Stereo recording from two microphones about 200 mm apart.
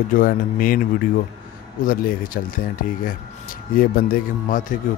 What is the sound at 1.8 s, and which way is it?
Speech, 45° left (ahead or behind).